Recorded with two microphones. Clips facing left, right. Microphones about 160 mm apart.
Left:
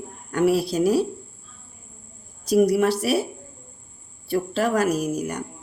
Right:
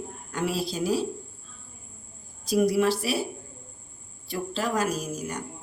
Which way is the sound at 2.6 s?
60° left (ahead or behind).